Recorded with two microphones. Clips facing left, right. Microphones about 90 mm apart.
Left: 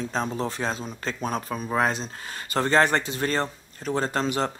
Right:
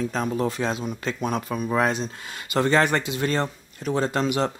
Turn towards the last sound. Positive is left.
turn(degrees=35)  # may be behind; listen again after turning